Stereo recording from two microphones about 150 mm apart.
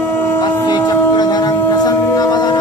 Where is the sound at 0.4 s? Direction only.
30° left (ahead or behind).